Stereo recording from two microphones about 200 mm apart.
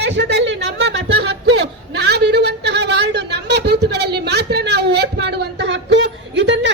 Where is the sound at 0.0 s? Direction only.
60° right (ahead or behind).